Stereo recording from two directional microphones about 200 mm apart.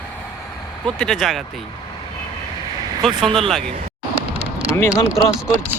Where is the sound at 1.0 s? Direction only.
Centre (ahead or behind).